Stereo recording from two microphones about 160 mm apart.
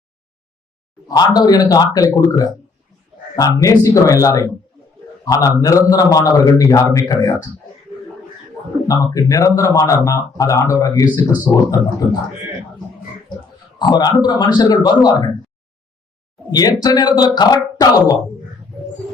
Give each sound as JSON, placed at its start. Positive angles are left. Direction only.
{"t": 1.0, "sound": "speech", "side_deg": 25}
{"t": 8.9, "sound": "speech", "side_deg": 25}
{"t": 13.7, "sound": "speech", "side_deg": 25}
{"t": 16.5, "sound": "speech", "side_deg": 25}